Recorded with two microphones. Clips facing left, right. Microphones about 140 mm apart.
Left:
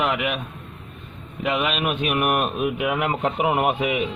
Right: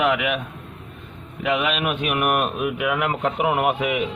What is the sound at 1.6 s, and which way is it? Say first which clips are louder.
A man's voice: even; 25° left (ahead or behind).